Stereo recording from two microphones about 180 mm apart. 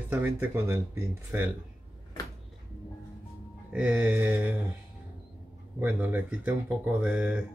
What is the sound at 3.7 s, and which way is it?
Speech, 5° right (ahead or behind).